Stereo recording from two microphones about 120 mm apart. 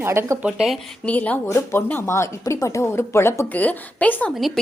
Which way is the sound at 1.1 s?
15° left (ahead or behind).